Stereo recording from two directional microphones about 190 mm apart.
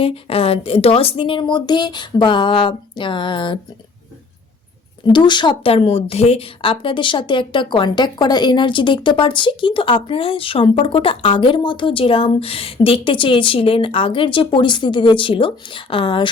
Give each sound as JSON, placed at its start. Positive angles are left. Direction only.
{"t": 0.0, "sound": "speech", "side_deg": 30}
{"t": 5.0, "sound": "speech", "side_deg": 25}